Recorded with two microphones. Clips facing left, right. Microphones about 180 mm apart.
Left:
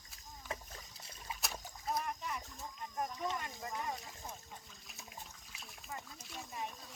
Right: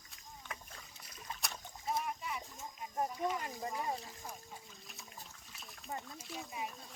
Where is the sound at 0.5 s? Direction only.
30° left (ahead or behind).